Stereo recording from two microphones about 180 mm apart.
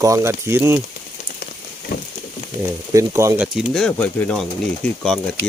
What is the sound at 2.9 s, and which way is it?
Speech, 20° right (ahead or behind).